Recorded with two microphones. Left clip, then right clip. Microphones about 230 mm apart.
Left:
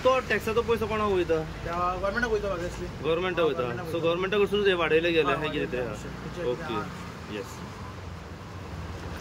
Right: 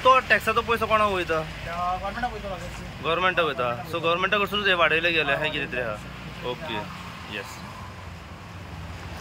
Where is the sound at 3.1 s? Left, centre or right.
Centre.